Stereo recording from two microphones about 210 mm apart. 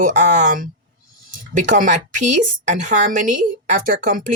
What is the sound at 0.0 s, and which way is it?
Speech, 35° right (ahead or behind).